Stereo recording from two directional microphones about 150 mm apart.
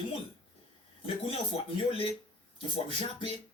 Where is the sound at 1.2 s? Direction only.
35° left (ahead or behind).